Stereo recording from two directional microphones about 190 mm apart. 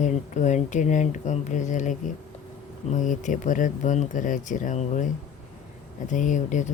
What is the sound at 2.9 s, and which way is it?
Speech, 40° left (ahead or behind).